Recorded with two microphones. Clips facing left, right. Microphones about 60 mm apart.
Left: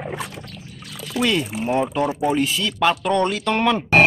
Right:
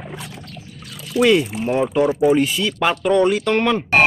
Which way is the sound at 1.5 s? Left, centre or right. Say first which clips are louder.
Right 2 dB; centre.